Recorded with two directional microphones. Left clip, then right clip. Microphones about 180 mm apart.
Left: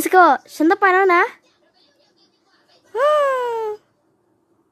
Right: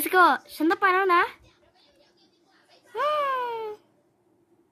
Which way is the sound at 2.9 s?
35° left (ahead or behind).